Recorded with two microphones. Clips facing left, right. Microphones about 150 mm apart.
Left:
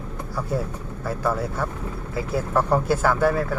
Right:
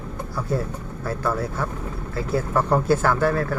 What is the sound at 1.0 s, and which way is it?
Speech, 10° left (ahead or behind).